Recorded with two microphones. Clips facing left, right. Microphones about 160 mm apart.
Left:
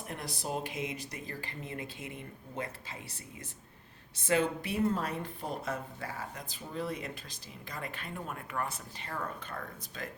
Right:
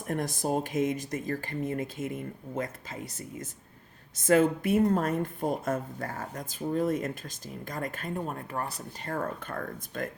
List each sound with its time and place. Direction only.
0.1 s speech: 45° right (ahead or behind)